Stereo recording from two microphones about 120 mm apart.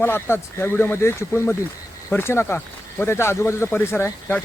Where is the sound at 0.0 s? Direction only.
20° left (ahead or behind).